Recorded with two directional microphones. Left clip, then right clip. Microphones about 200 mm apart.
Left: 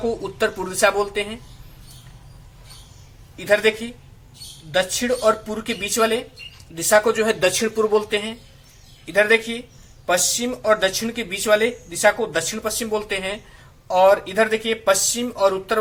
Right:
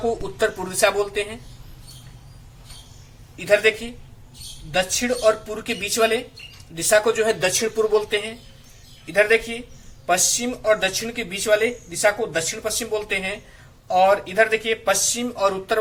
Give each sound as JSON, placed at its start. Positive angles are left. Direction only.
{"t": 0.0, "sound": "speech", "side_deg": 15}
{"t": 3.3, "sound": "speech", "side_deg": 15}